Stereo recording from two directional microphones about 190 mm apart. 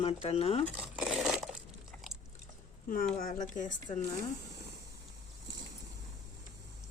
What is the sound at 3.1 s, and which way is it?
Speech, 45° left (ahead or behind).